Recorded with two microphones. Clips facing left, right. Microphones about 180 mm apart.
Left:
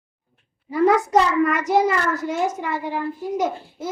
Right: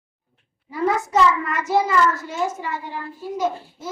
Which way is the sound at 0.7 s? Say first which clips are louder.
Left 5 dB; 60° left (ahead or behind).